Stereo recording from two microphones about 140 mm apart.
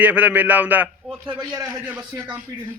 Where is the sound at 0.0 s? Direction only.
10° right (ahead or behind).